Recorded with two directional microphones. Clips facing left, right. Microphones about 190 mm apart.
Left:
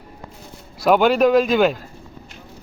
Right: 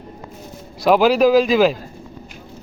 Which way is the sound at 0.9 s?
Centre (ahead or behind).